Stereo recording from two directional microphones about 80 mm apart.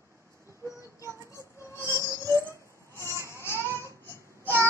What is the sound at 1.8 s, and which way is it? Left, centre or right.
Music, right.